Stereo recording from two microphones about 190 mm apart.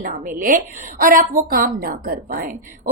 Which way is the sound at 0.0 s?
50° right (ahead or behind).